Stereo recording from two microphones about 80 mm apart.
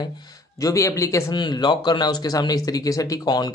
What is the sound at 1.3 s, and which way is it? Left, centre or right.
Speech, left.